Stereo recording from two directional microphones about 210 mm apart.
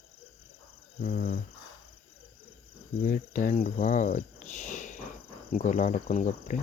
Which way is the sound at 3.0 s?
40° left (ahead or behind).